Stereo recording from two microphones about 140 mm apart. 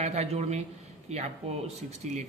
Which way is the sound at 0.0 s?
50° right (ahead or behind).